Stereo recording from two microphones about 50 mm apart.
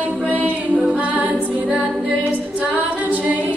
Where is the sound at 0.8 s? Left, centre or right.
Right.